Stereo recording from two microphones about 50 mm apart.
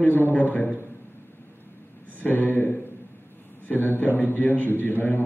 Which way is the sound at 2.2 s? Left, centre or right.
Left.